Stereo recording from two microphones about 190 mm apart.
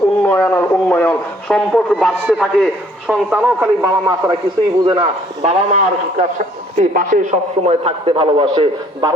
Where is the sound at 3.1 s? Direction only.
10° right (ahead or behind).